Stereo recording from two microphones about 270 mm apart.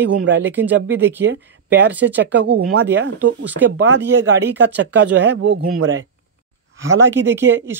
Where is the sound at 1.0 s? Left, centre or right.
Centre.